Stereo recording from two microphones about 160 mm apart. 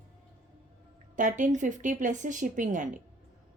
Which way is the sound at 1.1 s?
55° right (ahead or behind).